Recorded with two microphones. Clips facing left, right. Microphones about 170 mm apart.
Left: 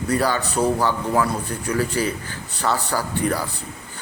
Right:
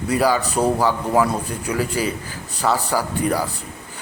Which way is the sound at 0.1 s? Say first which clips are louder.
Right 3 dB; 10° right (ahead or behind).